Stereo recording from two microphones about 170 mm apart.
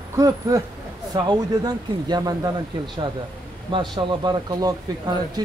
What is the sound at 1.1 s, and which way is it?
Speech, 25° right (ahead or behind).